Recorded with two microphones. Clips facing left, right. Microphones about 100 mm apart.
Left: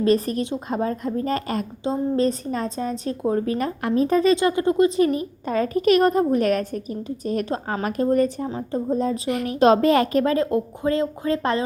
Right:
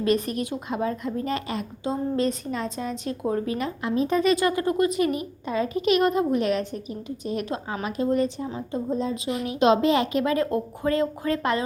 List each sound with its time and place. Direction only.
0.0 s a woman's voice: 35° left (ahead or behind)
1.8 s a woman's voice: 30° left (ahead or behind)
10.3 s speech: 25° left (ahead or behind)